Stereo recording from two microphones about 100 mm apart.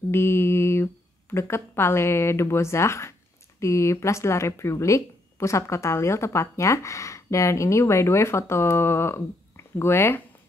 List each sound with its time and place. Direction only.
0.1 s mantra: 25° left (ahead or behind)
1.3 s speech: 25° left (ahead or behind)